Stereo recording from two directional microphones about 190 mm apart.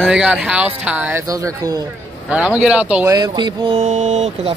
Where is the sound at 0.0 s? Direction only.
5° right (ahead or behind).